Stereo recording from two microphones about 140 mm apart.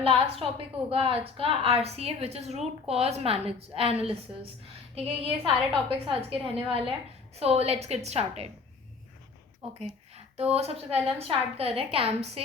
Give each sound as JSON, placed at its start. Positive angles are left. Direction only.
{"t": 0.0, "sound": "a woman's voice", "side_deg": -40}
{"t": 4.9, "sound": "a woman's voice", "side_deg": -45}
{"t": 9.6, "sound": "a woman's voice", "side_deg": -45}